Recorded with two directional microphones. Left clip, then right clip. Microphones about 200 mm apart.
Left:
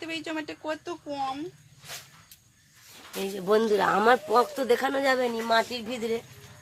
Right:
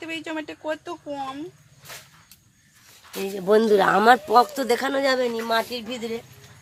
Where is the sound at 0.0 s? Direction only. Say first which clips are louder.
Right 2 dB; 25° right (ahead or behind).